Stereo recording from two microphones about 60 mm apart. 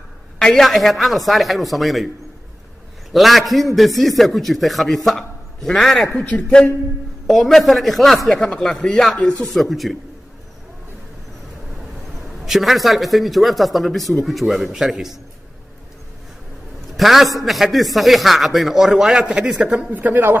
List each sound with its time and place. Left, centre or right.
0.4 s a man's voice: centre
3.1 s a man's voice: centre
6.1 s a man's voice: centre
7.2 s a man's voice: centre
12.4 s a man's voice: centre
16.9 s a man's voice: centre
19.2 s a man's voice: centre
19.9 s a man's voice: right